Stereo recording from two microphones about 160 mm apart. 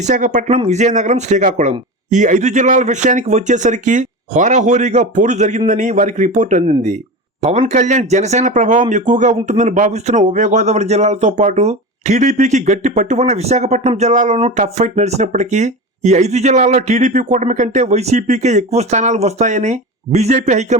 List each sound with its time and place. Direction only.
0.0 s speech: 50° right (ahead or behind)